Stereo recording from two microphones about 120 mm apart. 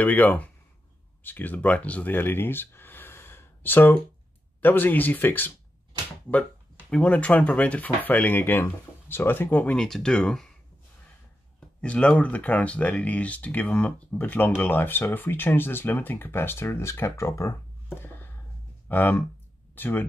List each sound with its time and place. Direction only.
0.0 s speech: 15° left (ahead or behind)
6.9 s speech: 10° left (ahead or behind)
11.8 s speech: 10° left (ahead or behind)
17.9 s a sound: 20° left (ahead or behind)
18.9 s speech: 15° left (ahead or behind)